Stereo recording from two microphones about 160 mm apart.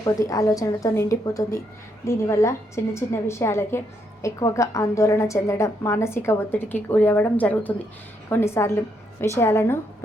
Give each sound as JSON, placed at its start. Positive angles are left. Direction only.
{"t": 0.0, "sound": "a woman's voice", "side_deg": 20}